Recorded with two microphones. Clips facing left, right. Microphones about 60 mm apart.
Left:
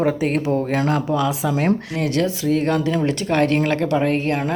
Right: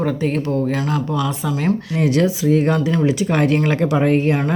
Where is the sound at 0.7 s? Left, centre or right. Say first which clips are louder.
Left 1 dB; left.